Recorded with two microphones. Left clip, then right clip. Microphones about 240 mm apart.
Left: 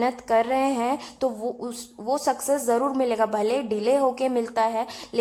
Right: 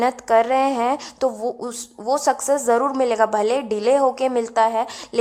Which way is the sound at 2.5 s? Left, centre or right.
Right.